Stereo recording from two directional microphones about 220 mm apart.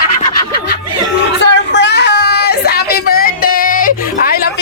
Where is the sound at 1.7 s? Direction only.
50° left (ahead or behind).